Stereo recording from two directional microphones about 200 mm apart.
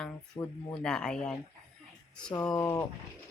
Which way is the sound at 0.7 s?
5° left (ahead or behind).